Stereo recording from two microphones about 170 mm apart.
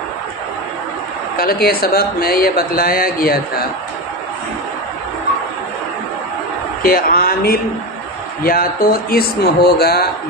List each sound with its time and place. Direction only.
1.3 s speech: 60° left (ahead or behind)
6.8 s speech: 60° left (ahead or behind)